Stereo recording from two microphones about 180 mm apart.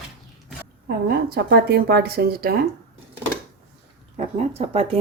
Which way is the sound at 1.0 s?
60° right (ahead or behind).